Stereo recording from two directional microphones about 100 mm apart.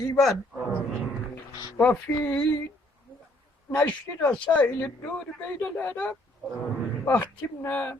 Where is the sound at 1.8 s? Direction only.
15° left (ahead or behind).